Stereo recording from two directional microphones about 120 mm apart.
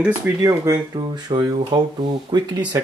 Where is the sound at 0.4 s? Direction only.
30° right (ahead or behind).